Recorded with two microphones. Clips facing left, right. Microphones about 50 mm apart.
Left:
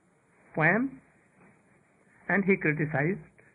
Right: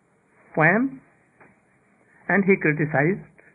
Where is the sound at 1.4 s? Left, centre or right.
Right.